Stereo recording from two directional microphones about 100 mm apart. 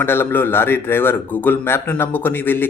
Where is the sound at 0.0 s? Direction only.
20° left (ahead or behind).